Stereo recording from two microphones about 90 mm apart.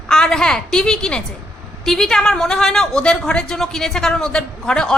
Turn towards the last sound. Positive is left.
turn(degrees=10)  # may be behind; listen again after turning